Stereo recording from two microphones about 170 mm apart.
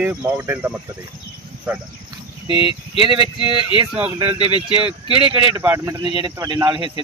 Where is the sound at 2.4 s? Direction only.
30° left (ahead or behind).